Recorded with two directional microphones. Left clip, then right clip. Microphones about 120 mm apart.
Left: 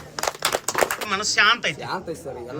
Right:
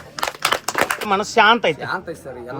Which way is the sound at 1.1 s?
60° right (ahead or behind).